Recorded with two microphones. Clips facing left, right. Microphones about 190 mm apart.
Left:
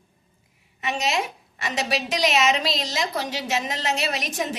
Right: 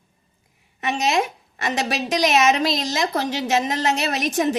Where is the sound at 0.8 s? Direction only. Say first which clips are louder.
Right 4 dB; 45° right (ahead or behind).